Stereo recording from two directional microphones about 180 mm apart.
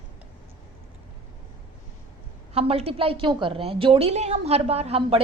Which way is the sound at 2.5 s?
35° right (ahead or behind).